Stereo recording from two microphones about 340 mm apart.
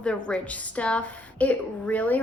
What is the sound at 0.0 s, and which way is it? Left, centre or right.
A woman's voice, centre.